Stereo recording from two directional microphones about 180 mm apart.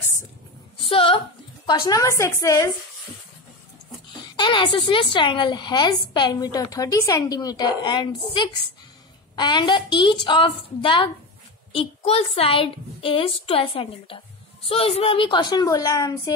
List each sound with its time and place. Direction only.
0.7 s a sound: 30° left (ahead or behind)
1.7 s a woman's voice: 20° left (ahead or behind)
4.2 s a woman's voice: 25° left (ahead or behind)